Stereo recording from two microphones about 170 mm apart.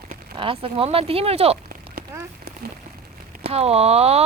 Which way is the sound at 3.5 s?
35° right (ahead or behind).